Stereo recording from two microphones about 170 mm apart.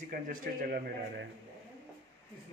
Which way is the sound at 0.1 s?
55° right (ahead or behind).